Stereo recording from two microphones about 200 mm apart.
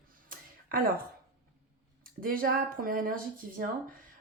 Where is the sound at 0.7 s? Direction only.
45° right (ahead or behind).